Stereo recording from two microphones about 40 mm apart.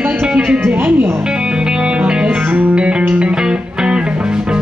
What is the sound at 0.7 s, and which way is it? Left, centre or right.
Speech, right.